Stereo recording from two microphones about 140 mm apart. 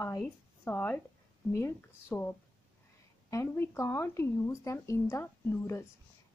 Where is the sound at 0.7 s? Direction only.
15° left (ahead or behind).